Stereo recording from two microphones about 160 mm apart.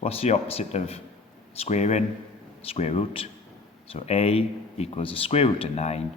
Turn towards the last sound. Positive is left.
turn(degrees=40)  # may be behind; listen again after turning